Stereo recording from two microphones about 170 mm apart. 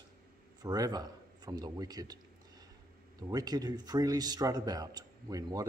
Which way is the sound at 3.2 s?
20° right (ahead or behind).